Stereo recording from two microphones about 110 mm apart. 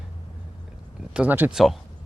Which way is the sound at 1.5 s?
Centre (ahead or behind).